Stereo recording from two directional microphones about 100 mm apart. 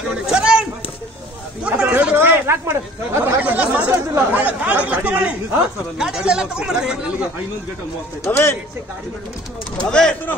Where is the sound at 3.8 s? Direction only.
25° right (ahead or behind).